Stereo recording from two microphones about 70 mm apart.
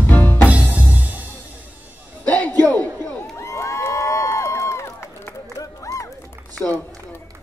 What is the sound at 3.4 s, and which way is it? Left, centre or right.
Crowd, left.